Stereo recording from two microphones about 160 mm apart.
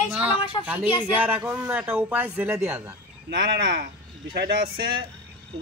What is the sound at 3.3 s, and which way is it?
Speech, 90° right.